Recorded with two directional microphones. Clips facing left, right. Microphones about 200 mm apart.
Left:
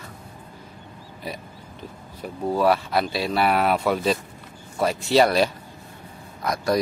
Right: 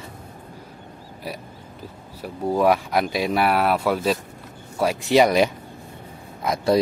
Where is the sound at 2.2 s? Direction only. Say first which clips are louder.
Right 1 dB; 10° right (ahead or behind).